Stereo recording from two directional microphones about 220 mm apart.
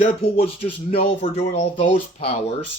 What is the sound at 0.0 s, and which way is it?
Speech, 25° left (ahead or behind).